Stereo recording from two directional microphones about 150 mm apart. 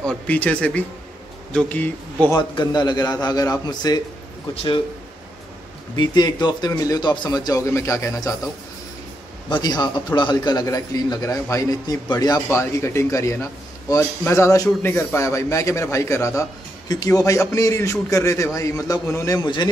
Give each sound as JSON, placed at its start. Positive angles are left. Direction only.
{"t": 0.0, "sound": "speech", "side_deg": 10}
{"t": 2.3, "sound": "a man's voice", "side_deg": 30}
{"t": 5.9, "sound": "a man's voice", "side_deg": 30}
{"t": 9.5, "sound": "a man's voice", "side_deg": 30}